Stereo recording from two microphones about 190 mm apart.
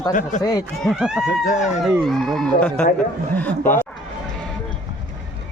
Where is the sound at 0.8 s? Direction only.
5° right (ahead or behind).